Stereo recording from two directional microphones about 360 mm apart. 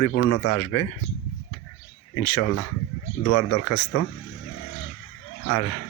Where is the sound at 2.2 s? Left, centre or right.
Left.